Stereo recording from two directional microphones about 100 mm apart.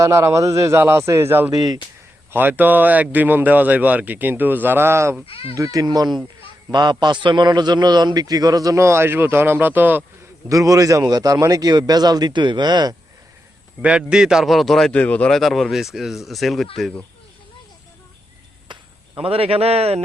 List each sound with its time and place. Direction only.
0.0 s a man's voice: 30° right (ahead or behind)
5.2 s speech: 70° left (ahead or behind)
5.5 s a man's voice: 35° right (ahead or behind); by 10.0 s 20° right (ahead or behind)
10.5 s a man's voice: 35° right (ahead or behind)
13.8 s a man's voice: 10° right (ahead or behind); by 15.3 s 15° left (ahead or behind)
15.3 s a man's voice: centre (ahead or behind)
19.2 s a man's voice: 75° right (ahead or behind); by 20.0 s 90° right